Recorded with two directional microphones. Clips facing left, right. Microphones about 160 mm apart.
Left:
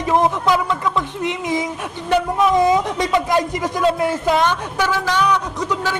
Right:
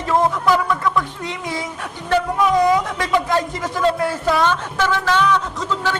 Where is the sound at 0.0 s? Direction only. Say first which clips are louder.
Left 1 dB; 20° left (ahead or behind).